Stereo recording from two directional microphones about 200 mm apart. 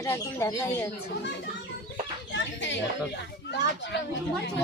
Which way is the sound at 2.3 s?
65° left (ahead or behind).